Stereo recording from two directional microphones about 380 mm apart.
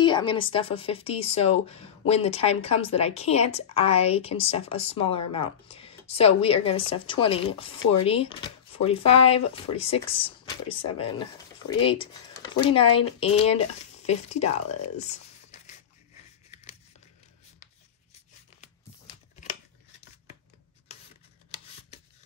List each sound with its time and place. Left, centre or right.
0.0 s speech: centre